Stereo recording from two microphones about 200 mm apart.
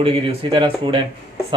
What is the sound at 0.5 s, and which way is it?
Speech, 25° right (ahead or behind).